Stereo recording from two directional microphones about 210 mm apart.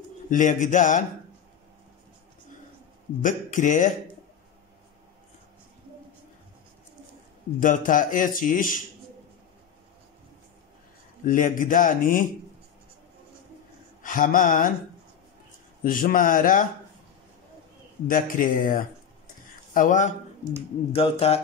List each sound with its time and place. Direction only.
0.3 s speech: 35° left (ahead or behind)
3.2 s speech: 40° left (ahead or behind)
7.6 s speech: 40° left (ahead or behind)
11.2 s speech: 40° left (ahead or behind)
14.0 s speech: 40° left (ahead or behind)
15.8 s speech: 40° left (ahead or behind)
18.0 s speech: 40° left (ahead or behind)
20.9 s a sound: 30° left (ahead or behind)